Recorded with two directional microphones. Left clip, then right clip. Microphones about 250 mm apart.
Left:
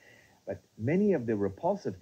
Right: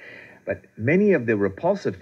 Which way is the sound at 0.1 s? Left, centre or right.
Left.